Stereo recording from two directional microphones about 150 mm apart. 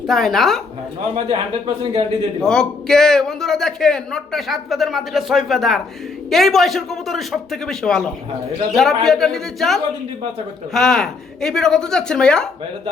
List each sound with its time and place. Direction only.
0.1 s a man's voice: centre (ahead or behind)
1.1 s a man's voice: 40° right (ahead or behind)
2.4 s a man's voice: 5° left (ahead or behind)